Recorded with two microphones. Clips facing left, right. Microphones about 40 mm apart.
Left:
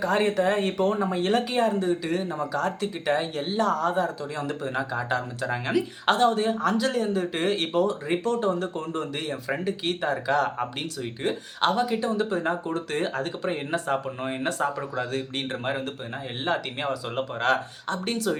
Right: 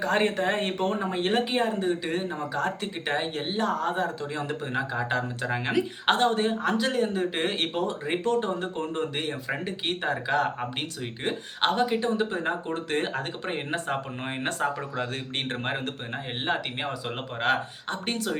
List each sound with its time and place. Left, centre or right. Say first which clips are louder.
0.0 s speech: left 2 dB; right
16.9 s speech: left 4 dB; right